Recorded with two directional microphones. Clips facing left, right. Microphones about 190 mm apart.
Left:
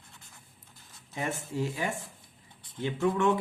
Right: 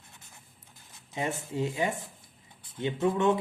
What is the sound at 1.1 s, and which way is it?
Speech, 20° right (ahead or behind).